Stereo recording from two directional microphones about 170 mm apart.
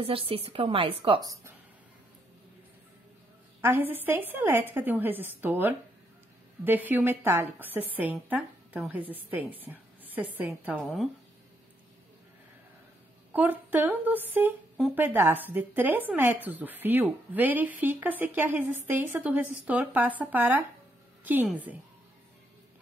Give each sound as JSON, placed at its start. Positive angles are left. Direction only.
{"t": 0.0, "sound": "a woman's voice", "side_deg": -30}
{"t": 3.6, "sound": "a woman's voice", "side_deg": -10}
{"t": 13.3, "sound": "a woman's voice", "side_deg": -10}